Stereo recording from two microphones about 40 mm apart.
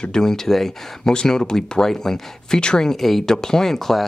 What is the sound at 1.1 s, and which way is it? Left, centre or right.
Speech, centre.